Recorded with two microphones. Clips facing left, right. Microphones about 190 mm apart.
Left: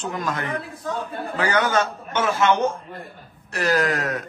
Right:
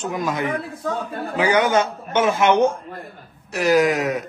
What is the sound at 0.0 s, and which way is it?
A man's voice, 10° right (ahead or behind).